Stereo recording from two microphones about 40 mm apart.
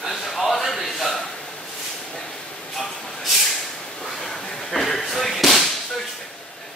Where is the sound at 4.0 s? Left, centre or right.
Centre.